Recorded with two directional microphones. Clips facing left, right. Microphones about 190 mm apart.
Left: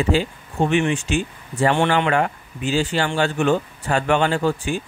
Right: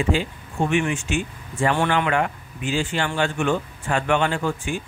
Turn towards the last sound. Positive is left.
turn(degrees=35)  # may be behind; listen again after turning